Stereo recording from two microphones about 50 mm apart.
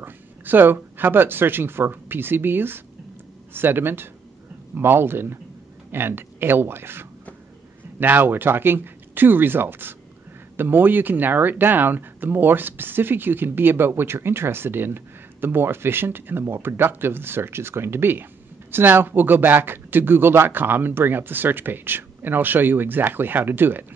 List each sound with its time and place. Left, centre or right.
0.0 s speech: right